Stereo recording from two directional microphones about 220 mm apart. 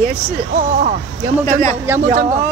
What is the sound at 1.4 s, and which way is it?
Speech, 35° right (ahead or behind).